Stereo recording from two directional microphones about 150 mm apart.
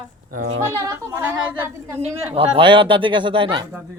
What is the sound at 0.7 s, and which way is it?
Speech, 20° right (ahead or behind).